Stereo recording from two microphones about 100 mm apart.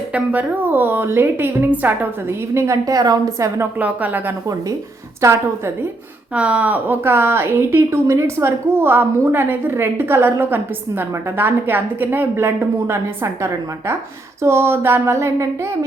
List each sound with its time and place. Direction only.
0.1 s a woman's voice: 15° right (ahead or behind); by 3.7 s 35° right (ahead or behind)
3.8 s a woman's voice: 15° right (ahead or behind)
6.3 s a woman's voice: 15° right (ahead or behind)